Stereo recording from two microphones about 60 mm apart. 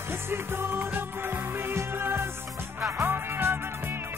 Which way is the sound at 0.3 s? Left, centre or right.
Right.